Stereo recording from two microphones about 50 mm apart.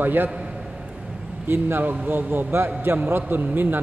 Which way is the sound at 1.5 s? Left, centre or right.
Right.